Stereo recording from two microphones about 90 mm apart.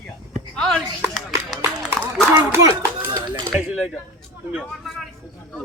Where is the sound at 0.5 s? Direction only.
5° left (ahead or behind).